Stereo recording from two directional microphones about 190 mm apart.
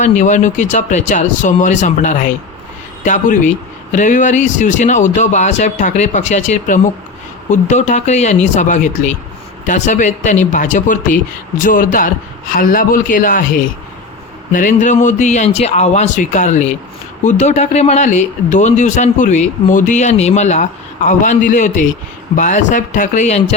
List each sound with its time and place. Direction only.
0.0 s speech: 40° left (ahead or behind)
14.5 s speech: 40° left (ahead or behind)